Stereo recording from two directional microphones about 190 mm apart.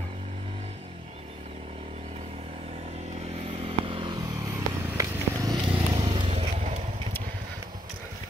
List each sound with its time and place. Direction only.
3.4 s vehicle: 30° right (ahead or behind)